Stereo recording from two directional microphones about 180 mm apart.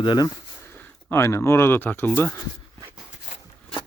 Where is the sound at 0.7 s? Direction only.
15° left (ahead or behind).